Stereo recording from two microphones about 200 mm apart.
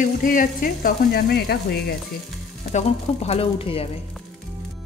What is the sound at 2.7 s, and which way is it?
Speech, 30° left (ahead or behind).